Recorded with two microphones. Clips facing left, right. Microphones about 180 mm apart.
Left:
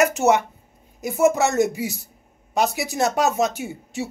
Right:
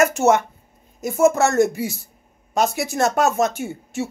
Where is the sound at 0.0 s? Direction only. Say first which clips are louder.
Right 1 dB; 15° left (ahead or behind).